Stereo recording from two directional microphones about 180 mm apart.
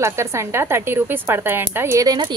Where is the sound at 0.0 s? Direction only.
15° right (ahead or behind).